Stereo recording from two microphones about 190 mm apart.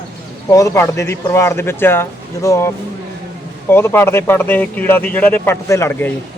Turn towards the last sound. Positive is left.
turn(degrees=15)  # may be behind; listen again after turning